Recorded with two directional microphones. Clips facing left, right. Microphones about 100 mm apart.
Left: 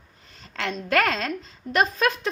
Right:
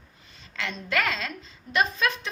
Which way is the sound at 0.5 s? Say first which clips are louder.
Left 5 dB; 45° left (ahead or behind).